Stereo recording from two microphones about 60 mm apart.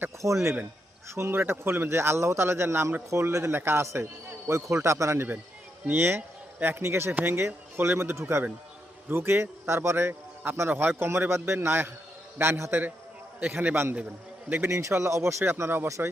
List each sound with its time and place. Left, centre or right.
0.2 s a man's voice: right
5.9 s a man's voice: right
13.4 s a man's voice: right
14.7 s a man's voice: right
16.0 s a man's voice: right